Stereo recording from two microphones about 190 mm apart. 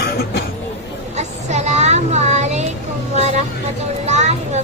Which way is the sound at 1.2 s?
35° right (ahead or behind).